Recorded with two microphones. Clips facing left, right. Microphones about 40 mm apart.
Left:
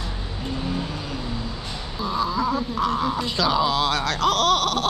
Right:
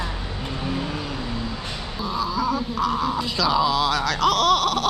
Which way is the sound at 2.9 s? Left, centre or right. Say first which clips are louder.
Even; left.